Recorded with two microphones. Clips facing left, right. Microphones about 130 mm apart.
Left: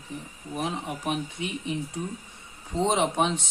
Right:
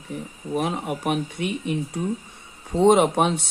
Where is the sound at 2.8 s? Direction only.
55° right (ahead or behind).